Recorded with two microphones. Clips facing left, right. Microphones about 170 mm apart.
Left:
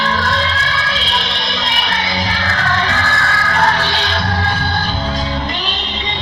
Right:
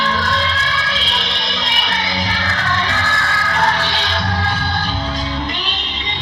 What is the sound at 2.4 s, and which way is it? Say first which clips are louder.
Music: left 3 dB; 60° left (ahead or behind).